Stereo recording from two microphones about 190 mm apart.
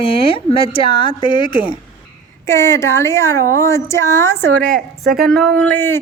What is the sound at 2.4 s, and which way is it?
A woman's voice, 15° left (ahead or behind).